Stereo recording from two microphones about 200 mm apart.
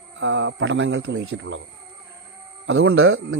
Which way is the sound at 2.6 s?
75° right (ahead or behind).